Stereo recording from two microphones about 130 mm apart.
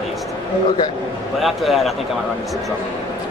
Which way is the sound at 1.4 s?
Centre (ahead or behind).